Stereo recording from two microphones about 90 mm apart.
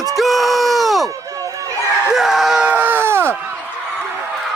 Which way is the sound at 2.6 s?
20° right (ahead or behind).